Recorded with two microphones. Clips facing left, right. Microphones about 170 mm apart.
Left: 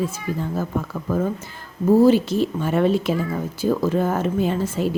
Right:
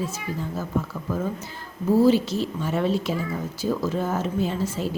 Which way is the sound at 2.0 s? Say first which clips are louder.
Left 3 dB; 55° left (ahead or behind).